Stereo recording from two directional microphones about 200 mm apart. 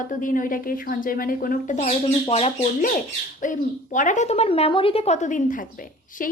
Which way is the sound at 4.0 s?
40° left (ahead or behind).